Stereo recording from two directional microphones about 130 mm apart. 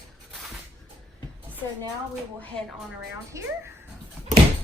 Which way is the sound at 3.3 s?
25° right (ahead or behind).